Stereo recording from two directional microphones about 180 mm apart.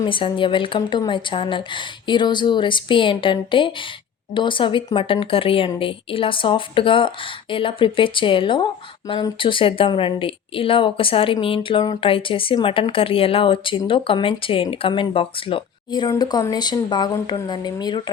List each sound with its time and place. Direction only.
0.0 s a woman's voice: 30° left (ahead or behind)